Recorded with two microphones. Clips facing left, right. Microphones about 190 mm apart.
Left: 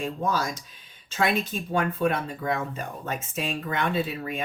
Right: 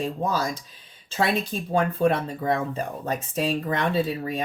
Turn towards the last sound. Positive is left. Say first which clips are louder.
# right 3 dB
turn(degrees=-35)  # may be behind; listen again after turning